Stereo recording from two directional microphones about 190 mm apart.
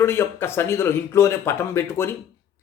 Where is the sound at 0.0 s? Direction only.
10° left (ahead or behind).